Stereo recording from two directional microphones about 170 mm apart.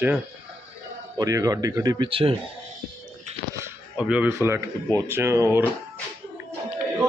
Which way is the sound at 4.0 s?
5° right (ahead or behind).